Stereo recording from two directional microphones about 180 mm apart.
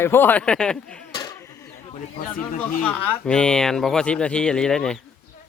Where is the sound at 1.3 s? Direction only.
15° left (ahead or behind).